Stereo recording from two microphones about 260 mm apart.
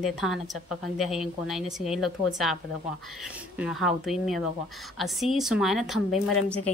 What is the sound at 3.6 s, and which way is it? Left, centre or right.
A woman's voice, centre.